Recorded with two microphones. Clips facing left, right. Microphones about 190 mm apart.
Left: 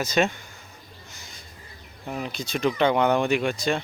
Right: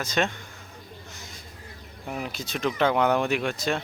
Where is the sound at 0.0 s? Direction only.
5° left (ahead or behind).